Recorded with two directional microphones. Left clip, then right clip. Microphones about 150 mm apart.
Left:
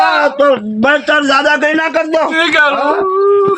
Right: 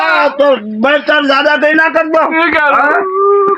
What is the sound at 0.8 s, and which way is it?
A man's voice, 20° right (ahead or behind).